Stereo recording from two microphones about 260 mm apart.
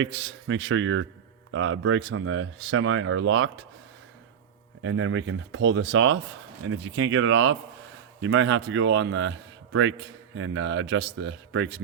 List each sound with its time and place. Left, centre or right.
0.0 s speech: right
4.8 s speech: right